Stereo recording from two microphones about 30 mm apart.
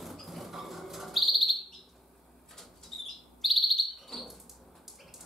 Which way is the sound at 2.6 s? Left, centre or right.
Centre.